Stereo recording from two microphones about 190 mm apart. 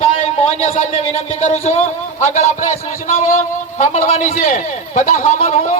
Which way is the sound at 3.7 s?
40° left (ahead or behind).